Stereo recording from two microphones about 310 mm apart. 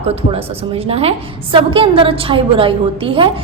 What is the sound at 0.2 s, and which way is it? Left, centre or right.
A woman's voice, centre.